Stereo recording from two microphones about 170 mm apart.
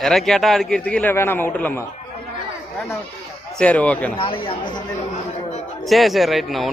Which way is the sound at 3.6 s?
10° left (ahead or behind).